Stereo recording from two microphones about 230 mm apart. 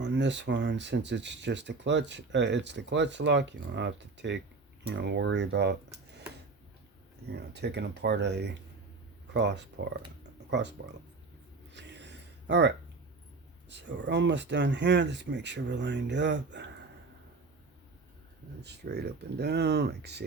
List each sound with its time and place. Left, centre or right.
0.0 s speech: right
7.3 s speech: right
11.7 s a sound: right
13.7 s speech: right
18.6 s speech: right